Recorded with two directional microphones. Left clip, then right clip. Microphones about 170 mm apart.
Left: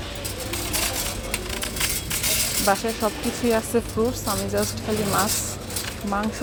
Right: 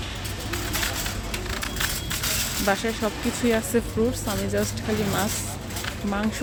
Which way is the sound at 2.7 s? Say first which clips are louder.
Left 2 dB; 15° right (ahead or behind).